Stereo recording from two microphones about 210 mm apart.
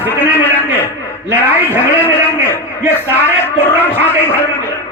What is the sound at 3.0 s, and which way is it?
A man's voice, 10° left (ahead or behind).